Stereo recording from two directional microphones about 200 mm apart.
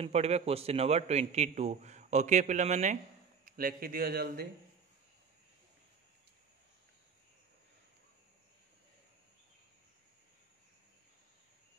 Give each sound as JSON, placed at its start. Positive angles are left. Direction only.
{"t": 0.0, "sound": "a man's voice", "side_deg": -30}